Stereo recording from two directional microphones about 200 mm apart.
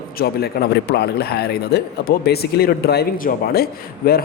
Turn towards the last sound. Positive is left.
turn(degrees=45)  # may be behind; listen again after turning